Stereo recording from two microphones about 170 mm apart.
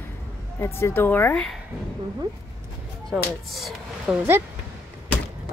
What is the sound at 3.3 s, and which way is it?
Speech, centre (ahead or behind).